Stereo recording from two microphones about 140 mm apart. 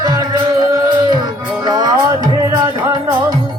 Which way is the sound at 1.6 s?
30° right (ahead or behind).